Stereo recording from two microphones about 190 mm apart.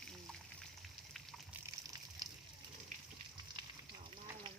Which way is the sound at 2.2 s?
20° right (ahead or behind).